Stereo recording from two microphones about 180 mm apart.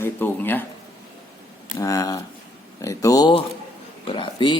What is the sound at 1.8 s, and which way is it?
Speech, 20° left (ahead or behind).